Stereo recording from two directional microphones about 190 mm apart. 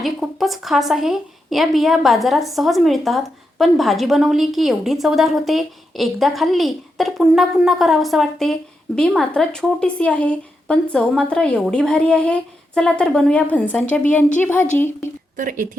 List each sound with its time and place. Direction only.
0.0 s a woman's voice: centre (ahead or behind)
15.4 s speech: 45° right (ahead or behind)